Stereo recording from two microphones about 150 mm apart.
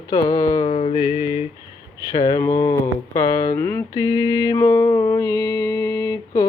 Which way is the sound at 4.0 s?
25° left (ahead or behind).